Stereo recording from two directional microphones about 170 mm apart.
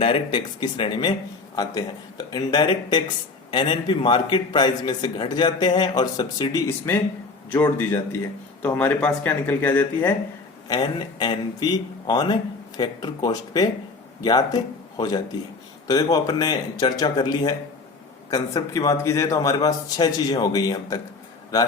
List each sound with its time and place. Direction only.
0.0 s a man's voice: 30° left (ahead or behind); by 10.2 s 10° left (ahead or behind)
10.7 s a man's voice: 25° left (ahead or behind)